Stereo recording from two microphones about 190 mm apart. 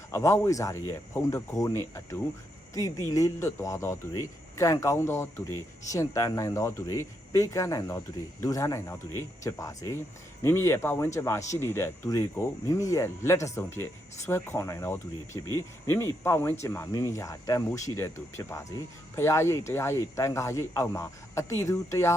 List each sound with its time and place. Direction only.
0.1 s speech: 15° left (ahead or behind)